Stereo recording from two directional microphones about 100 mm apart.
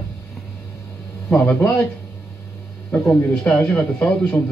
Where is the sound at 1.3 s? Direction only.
10° left (ahead or behind).